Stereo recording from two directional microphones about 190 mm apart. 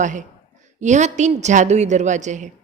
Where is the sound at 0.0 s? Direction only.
40° right (ahead or behind).